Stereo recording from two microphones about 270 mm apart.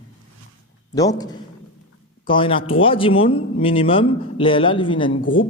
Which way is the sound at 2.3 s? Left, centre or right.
Centre.